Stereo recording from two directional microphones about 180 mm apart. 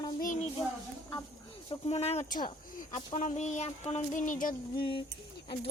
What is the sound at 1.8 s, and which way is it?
Speech, 35° left (ahead or behind).